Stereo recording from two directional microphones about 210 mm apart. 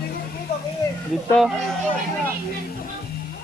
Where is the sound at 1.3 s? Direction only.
Centre (ahead or behind).